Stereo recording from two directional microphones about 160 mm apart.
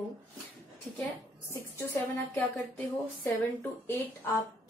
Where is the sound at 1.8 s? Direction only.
20° left (ahead or behind).